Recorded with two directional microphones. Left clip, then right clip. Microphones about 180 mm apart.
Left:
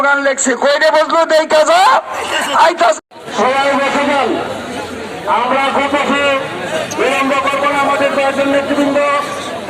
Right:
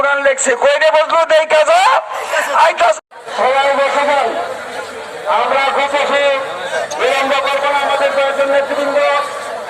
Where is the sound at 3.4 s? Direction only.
65° right (ahead or behind).